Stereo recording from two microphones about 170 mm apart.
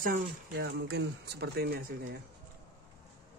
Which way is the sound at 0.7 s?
85° right.